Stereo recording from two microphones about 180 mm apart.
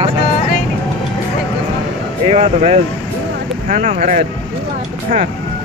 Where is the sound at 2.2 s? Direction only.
35° right (ahead or behind).